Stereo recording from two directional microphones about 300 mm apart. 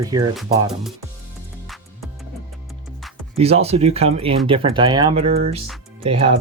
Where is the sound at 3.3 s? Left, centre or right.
Centre.